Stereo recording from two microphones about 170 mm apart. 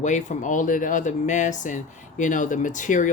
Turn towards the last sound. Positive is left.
turn(degrees=50)  # may be behind; listen again after turning